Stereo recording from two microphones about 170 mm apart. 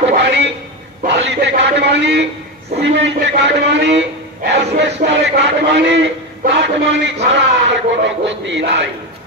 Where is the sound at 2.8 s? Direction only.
90° right.